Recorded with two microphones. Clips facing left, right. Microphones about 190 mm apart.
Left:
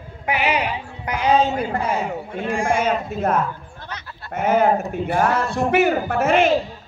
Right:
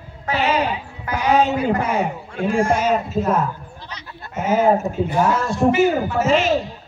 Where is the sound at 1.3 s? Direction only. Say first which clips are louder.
Right 1 dB; 70° right (ahead or behind).